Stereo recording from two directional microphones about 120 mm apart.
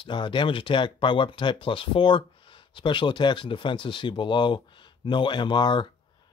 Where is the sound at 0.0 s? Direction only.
40° left (ahead or behind).